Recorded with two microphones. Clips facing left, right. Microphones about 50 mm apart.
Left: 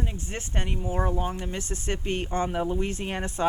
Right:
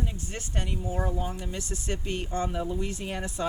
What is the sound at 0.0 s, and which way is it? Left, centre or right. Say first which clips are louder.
Speech: left 2 dB; left.